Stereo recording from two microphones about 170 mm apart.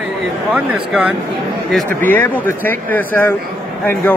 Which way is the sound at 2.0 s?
10° left (ahead or behind).